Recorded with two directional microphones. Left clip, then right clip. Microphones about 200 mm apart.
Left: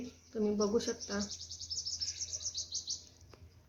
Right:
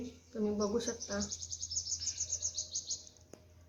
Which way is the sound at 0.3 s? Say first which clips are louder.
Left 2 dB; 30° left (ahead or behind).